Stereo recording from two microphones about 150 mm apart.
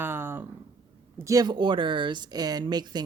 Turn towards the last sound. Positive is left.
turn(degrees=-30)  # may be behind; listen again after turning